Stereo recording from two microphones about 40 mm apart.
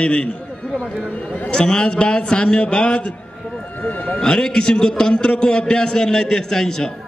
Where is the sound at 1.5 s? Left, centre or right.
Left.